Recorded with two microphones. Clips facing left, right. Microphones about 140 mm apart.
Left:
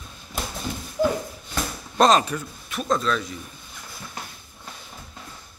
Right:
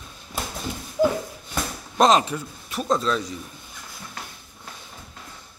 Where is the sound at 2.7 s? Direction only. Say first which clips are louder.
Right 1 dB; 30° right (ahead or behind).